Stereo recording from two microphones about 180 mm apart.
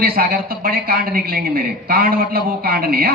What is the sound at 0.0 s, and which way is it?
A woman's voice, 55° right (ahead or behind).